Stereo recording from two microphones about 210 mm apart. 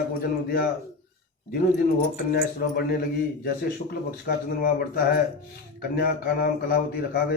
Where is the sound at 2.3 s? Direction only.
50° left (ahead or behind).